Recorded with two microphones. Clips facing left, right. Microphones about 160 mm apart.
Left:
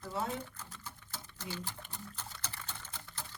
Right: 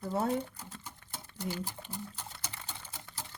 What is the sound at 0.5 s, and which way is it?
Sewing machine, 15° right (ahead or behind).